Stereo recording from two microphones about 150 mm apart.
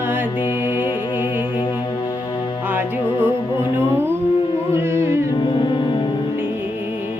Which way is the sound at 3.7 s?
15° right (ahead or behind).